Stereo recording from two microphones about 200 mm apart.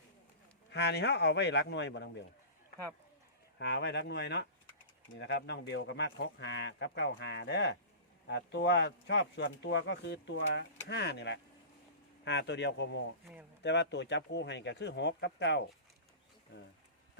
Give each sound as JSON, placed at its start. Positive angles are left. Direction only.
{"t": 0.7, "sound": "speech", "side_deg": 60}
{"t": 3.6, "sound": "speech", "side_deg": 60}